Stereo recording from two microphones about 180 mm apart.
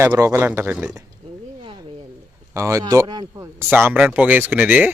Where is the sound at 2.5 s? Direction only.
15° right (ahead or behind).